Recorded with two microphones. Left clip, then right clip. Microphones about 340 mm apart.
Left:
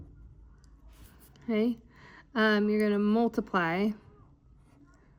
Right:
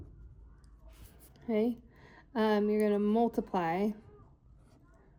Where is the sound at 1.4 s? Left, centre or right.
Left.